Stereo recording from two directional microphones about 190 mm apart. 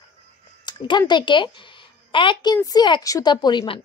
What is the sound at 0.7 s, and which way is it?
Speech, 25° left (ahead or behind).